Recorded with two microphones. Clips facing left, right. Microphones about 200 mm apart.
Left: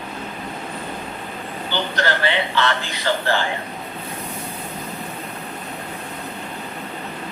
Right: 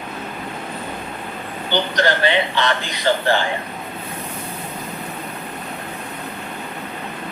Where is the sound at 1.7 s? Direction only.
15° right (ahead or behind).